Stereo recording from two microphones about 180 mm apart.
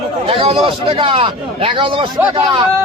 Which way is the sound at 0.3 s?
30° right (ahead or behind).